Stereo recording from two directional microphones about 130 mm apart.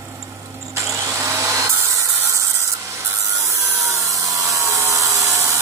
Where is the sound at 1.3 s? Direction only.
25° right (ahead or behind).